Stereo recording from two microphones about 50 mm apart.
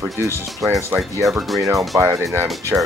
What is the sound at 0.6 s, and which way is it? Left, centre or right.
Speech, right.